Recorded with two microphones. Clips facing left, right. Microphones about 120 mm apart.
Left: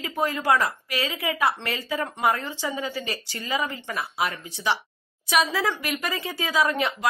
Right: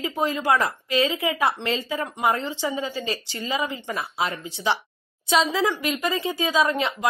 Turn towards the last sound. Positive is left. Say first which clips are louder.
# right 1 dB
turn(degrees=-20)  # may be behind; listen again after turning